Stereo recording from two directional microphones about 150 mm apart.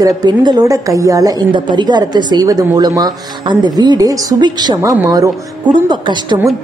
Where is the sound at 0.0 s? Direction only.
30° right (ahead or behind).